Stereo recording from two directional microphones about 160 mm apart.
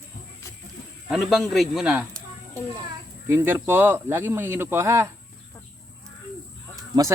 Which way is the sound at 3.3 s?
15° right (ahead or behind).